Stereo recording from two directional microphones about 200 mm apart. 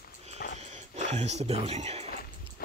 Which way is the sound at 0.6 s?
35° right (ahead or behind).